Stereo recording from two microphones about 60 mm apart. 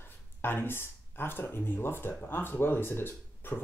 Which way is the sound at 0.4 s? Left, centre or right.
Left.